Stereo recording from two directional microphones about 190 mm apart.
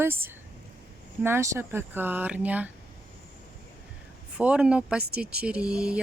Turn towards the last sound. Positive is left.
turn(degrees=-5)  # may be behind; listen again after turning